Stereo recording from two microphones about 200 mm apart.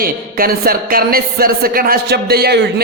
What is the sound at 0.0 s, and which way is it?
A woman's voice, 45° right (ahead or behind).